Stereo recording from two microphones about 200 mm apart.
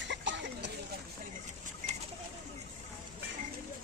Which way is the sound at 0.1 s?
65° right (ahead or behind).